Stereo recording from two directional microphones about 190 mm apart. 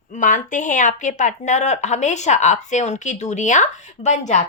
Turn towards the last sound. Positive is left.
turn(degrees=40)  # may be behind; listen again after turning